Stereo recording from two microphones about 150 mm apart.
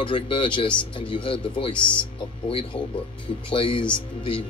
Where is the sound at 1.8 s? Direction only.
10° left (ahead or behind).